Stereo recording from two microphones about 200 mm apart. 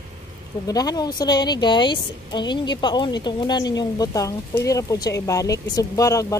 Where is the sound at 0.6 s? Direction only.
20° left (ahead or behind).